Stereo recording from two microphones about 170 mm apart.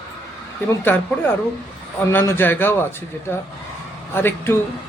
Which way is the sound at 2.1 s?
15° left (ahead or behind).